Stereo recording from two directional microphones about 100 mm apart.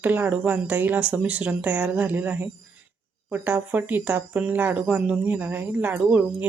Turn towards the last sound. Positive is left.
turn(degrees=-15)  # may be behind; listen again after turning